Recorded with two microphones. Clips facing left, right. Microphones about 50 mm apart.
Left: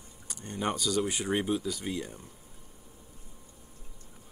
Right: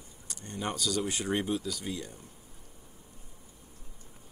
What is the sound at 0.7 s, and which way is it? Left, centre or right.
Speech, centre.